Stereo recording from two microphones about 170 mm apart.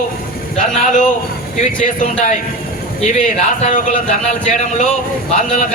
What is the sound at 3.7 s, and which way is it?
A man's voice, 45° left (ahead or behind).